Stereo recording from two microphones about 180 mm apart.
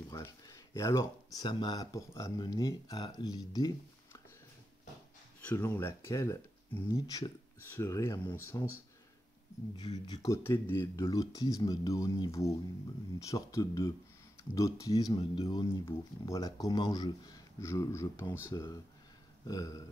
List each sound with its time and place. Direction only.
0.1 s speech: 15° left (ahead or behind)
5.4 s speech: 10° left (ahead or behind)
9.8 s speech: 25° left (ahead or behind)